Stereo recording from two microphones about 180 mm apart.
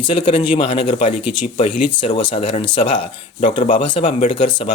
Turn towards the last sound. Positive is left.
turn(degrees=25)  # may be behind; listen again after turning